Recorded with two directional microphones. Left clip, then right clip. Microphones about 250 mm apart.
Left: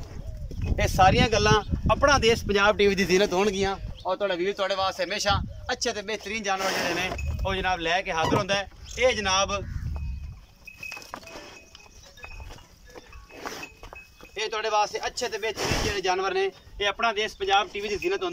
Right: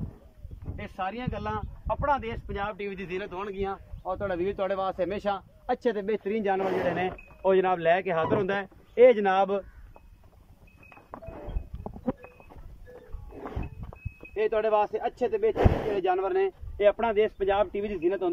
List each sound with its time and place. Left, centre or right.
0.7 s speech: left; by 4.1 s centre
4.1 s speech: centre; by 9.6 s right
14.5 s speech: right